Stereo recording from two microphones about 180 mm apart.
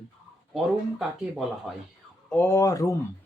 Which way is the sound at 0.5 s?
Centre (ahead or behind).